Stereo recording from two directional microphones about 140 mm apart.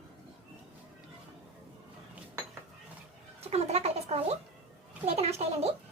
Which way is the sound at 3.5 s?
50° right (ahead or behind).